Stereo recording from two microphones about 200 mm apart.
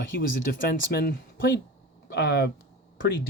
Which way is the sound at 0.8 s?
50° left (ahead or behind).